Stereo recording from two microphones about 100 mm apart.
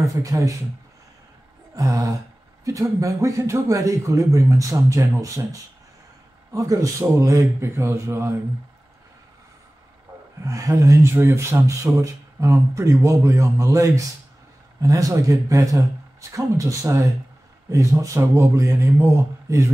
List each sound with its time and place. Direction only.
0.0 s a man's voice: 35° right (ahead or behind)
1.8 s a man's voice: 35° right (ahead or behind)
10.4 s a man's voice: 35° right (ahead or behind)